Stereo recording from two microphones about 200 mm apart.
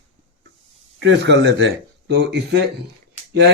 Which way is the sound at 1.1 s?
60° right (ahead or behind).